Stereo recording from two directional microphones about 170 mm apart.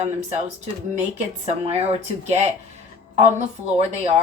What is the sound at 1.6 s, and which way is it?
Speech, 35° right (ahead or behind).